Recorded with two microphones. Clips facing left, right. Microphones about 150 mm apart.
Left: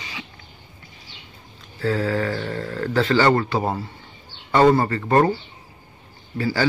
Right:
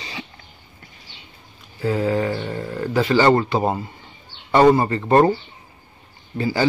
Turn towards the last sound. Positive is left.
turn(degrees=-20)  # may be behind; listen again after turning